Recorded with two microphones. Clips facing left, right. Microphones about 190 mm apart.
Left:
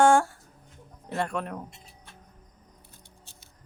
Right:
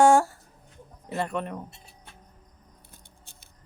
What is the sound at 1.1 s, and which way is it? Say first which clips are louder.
Speech: even; 5° right (ahead or behind).